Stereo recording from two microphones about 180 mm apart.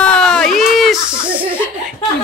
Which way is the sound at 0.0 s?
5° left (ahead or behind).